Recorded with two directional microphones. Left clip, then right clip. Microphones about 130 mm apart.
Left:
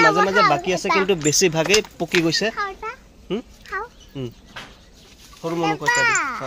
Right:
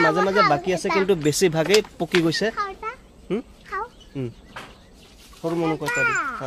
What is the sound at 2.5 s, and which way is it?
Cat, 40° left (ahead or behind).